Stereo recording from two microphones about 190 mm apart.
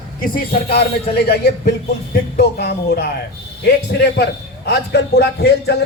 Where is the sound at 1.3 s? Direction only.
55° left (ahead or behind).